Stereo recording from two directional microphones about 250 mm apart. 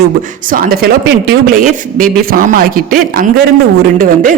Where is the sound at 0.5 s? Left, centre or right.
Right.